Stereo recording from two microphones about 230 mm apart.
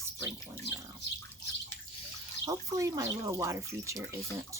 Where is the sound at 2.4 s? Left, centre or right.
Centre.